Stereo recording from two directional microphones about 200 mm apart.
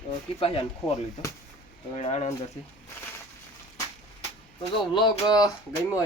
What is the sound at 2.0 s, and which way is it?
Speech, 30° left (ahead or behind).